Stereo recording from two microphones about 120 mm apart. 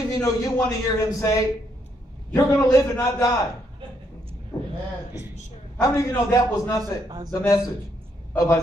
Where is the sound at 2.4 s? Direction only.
25° left (ahead or behind).